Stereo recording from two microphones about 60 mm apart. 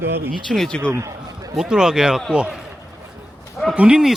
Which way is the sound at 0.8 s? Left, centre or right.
Right.